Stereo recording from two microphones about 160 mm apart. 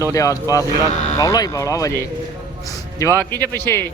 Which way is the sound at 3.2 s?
10° left (ahead or behind).